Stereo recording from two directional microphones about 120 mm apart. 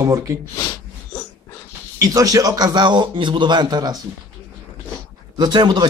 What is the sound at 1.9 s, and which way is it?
A man's voice, 30° right (ahead or behind).